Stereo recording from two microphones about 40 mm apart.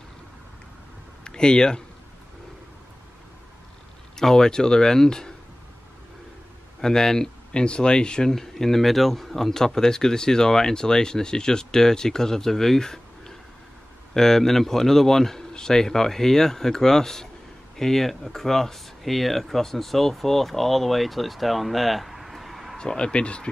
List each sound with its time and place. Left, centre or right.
1.2 s speech: left
4.2 s speech: centre
6.8 s speech: centre
22.8 s speech: left